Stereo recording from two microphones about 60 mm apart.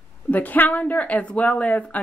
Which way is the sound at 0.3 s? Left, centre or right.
Left.